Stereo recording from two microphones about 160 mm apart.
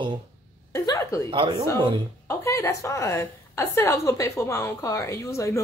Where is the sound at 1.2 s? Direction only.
30° right (ahead or behind).